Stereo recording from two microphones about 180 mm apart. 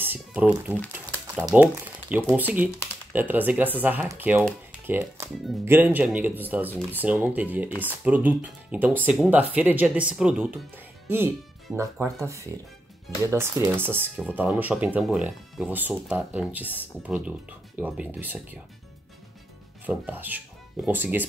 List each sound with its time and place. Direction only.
0.0 s a sound: 10° right (ahead or behind)
1.5 s speech: 10° right (ahead or behind)
19.9 s speech: 10° right (ahead or behind)